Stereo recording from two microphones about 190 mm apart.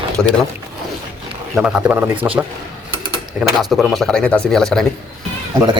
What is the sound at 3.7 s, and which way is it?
Speech, centre (ahead or behind).